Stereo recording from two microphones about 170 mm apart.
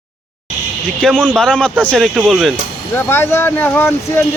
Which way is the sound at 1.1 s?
10° right (ahead or behind).